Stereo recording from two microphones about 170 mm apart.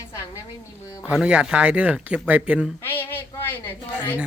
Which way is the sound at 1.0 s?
5° right (ahead or behind).